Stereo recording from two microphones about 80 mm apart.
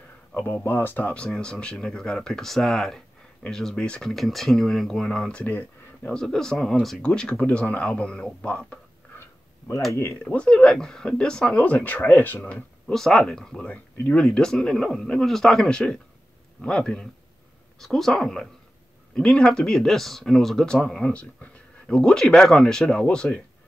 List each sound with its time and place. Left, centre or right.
0.3 s speech: left
4.1 s speech: centre
6.1 s speech: centre
7.3 s speech: left
10.2 s speech: centre
12.8 s speech: centre